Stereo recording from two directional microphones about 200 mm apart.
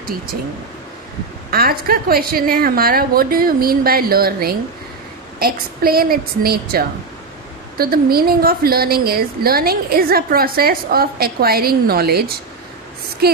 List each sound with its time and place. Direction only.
1.5 s a woman's voice: 50° right (ahead or behind)